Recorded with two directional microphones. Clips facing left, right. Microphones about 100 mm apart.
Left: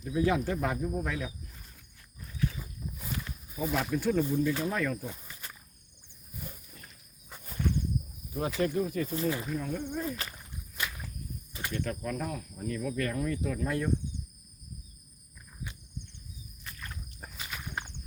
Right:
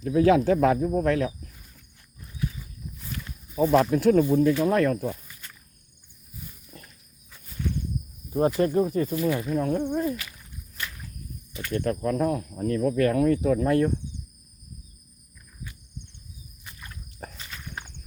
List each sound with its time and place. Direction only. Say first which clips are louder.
0.0 s speech: right 9 dB; 90° right
3.5 s speech: right 10 dB; 70° right (ahead or behind)
7.3 s walk: left 4 dB; 45° left (ahead or behind)
8.3 s speech: right 8 dB; 40° right (ahead or behind)
9.5 s speech: right 9 dB; 55° right (ahead or behind)
11.7 s speech: right 9 dB; 50° right (ahead or behind)
17.3 s walk: left 1 dB; 10° left (ahead or behind)